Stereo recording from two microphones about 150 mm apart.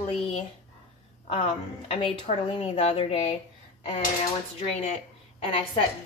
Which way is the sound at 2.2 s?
45° left (ahead or behind).